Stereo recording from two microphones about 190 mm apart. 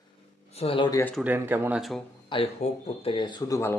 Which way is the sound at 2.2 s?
30° left (ahead or behind).